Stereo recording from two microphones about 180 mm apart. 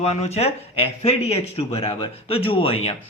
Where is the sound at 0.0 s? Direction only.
35° left (ahead or behind).